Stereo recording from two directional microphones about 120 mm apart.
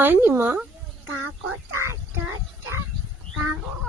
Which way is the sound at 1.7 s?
20° right (ahead or behind).